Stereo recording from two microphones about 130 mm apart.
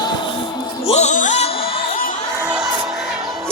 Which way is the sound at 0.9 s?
60° left (ahead or behind).